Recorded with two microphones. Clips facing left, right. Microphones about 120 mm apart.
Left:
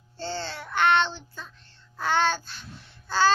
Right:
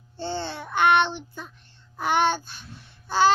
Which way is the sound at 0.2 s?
20° right (ahead or behind).